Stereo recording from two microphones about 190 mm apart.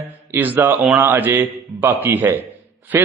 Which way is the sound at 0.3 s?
10° right (ahead or behind).